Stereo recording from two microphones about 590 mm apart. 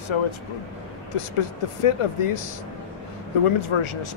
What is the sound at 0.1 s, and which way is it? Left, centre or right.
Speech, left.